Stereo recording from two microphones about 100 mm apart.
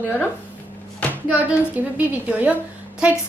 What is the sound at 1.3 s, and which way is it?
A woman's voice, 15° right (ahead or behind).